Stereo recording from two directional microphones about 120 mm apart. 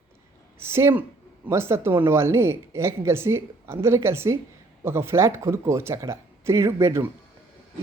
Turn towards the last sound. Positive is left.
turn(degrees=-25)  # may be behind; listen again after turning